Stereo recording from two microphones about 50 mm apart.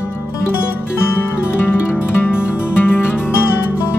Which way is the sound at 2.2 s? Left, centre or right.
Left.